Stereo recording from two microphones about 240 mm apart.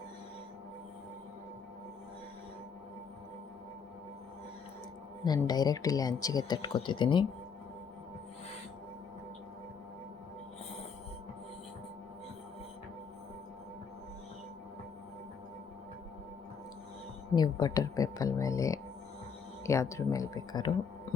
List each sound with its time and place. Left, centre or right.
5.2 s speech: centre
17.3 s speech: centre